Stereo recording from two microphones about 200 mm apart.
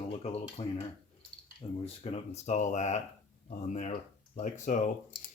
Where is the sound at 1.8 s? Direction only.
30° left (ahead or behind).